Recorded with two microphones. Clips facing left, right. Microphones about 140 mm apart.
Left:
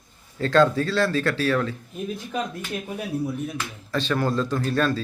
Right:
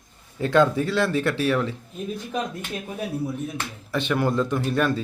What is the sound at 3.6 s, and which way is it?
Speech, 20° right (ahead or behind).